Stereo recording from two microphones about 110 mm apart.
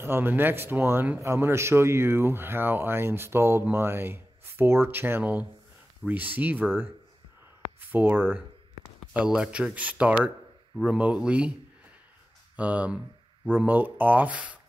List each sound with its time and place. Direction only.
0.0 s speech: 20° right (ahead or behind)
7.9 s speech: 15° right (ahead or behind)
12.5 s speech: 15° right (ahead or behind)